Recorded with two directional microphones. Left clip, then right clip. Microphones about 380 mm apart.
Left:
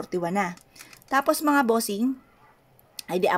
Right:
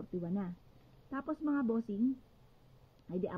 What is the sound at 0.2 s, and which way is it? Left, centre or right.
A woman's voice, centre.